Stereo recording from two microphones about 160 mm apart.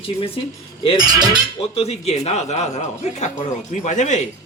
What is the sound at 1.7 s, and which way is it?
Speech, 40° left (ahead or behind).